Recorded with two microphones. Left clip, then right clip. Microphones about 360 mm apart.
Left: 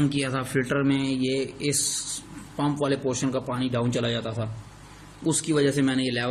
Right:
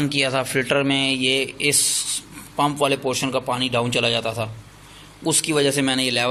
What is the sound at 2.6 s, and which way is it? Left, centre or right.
A man's voice, right.